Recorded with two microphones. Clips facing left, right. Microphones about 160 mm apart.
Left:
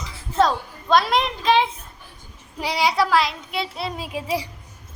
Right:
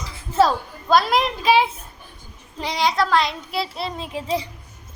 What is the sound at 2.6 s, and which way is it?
Child singing, 10° left (ahead or behind).